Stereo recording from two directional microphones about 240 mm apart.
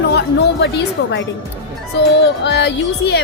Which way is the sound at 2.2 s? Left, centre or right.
Left.